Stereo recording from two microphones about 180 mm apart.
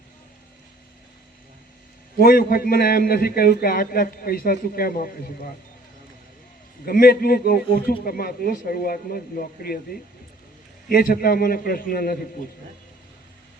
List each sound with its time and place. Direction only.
2.1 s a man's voice: 55° left (ahead or behind)
6.8 s a man's voice: 55° left (ahead or behind)